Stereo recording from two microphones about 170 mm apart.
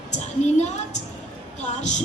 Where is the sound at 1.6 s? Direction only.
40° left (ahead or behind).